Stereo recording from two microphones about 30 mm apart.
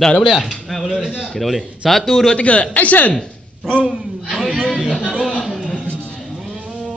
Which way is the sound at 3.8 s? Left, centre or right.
Centre.